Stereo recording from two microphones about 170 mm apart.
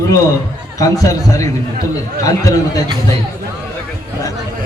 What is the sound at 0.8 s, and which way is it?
A man's voice, 20° left (ahead or behind).